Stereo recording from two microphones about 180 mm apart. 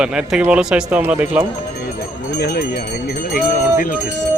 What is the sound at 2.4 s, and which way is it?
Speech, 60° left (ahead or behind).